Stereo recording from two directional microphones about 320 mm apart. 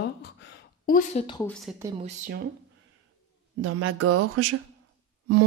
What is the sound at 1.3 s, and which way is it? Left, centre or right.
Speech, centre.